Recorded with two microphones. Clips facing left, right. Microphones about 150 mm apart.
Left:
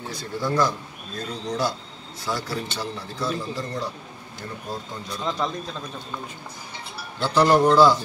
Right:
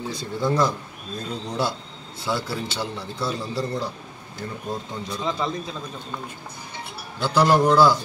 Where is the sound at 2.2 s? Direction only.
25° right (ahead or behind).